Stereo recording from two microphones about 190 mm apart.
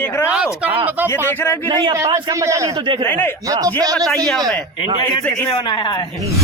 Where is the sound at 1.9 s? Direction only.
20° right (ahead or behind).